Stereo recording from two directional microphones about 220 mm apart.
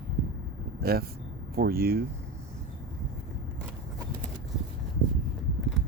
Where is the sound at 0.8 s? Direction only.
45° right (ahead or behind).